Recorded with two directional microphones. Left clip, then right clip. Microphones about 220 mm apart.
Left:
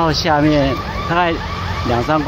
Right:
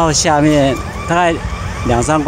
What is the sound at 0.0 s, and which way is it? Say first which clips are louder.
Speech: right 2 dB; 50° right (ahead or behind).